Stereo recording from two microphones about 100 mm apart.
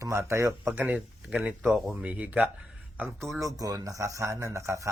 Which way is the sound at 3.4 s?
35° right (ahead or behind).